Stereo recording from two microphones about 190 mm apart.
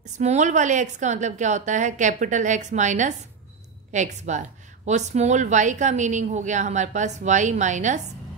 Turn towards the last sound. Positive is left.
turn(degrees=-40)  # may be behind; listen again after turning